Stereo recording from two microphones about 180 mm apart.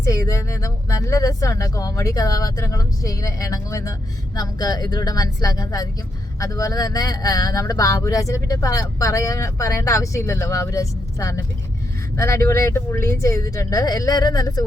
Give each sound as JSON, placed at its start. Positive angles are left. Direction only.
{"t": 0.0, "sound": "speech", "side_deg": 15}